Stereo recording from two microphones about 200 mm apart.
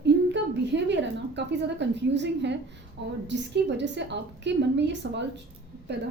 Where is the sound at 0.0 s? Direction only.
60° right (ahead or behind).